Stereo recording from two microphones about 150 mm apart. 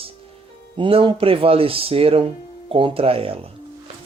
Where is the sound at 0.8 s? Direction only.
35° right (ahead or behind).